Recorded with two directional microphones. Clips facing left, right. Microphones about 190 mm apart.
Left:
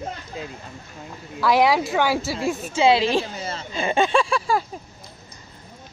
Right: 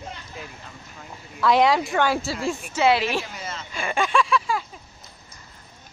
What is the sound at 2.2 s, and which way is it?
Speech, 20° left (ahead or behind).